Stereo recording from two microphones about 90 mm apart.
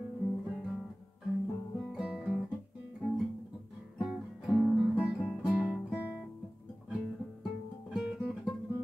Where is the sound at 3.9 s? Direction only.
Centre (ahead or behind).